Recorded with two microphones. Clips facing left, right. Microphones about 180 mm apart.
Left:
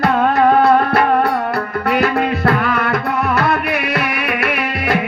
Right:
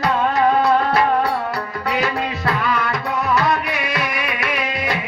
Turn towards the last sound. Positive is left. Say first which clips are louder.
# left 4 dB
turn(degrees=60)  # may be behind; listen again after turning